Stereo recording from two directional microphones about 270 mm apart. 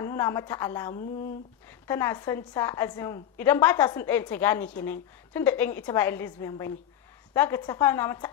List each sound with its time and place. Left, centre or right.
0.0 s a woman's voice: centre